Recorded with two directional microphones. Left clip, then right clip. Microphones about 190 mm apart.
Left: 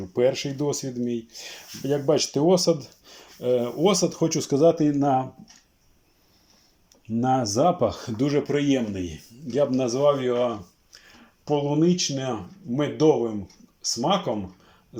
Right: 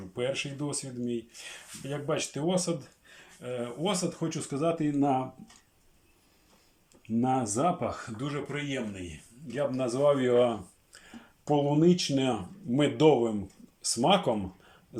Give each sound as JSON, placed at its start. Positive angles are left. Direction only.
{"t": 0.1, "sound": "speech", "side_deg": 20}
{"t": 4.9, "sound": "speech", "side_deg": -5}
{"t": 7.2, "sound": "speech", "side_deg": -5}
{"t": 7.5, "sound": "speech", "side_deg": 15}
{"t": 8.1, "sound": "speech", "side_deg": 30}
{"t": 9.6, "sound": "speech", "side_deg": 15}